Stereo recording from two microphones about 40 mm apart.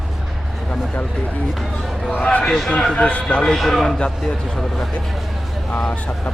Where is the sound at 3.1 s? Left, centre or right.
Left.